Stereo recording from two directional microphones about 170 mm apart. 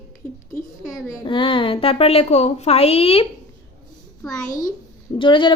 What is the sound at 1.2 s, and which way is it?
A woman's voice, 30° left (ahead or behind).